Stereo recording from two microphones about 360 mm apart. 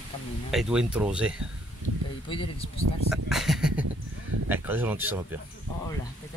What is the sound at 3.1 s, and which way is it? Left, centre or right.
Speech, centre.